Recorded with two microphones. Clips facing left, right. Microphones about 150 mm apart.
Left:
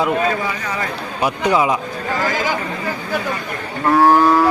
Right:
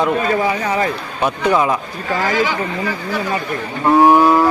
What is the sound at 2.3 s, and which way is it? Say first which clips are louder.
Speech: right 3 dB; 45° left (ahead or behind).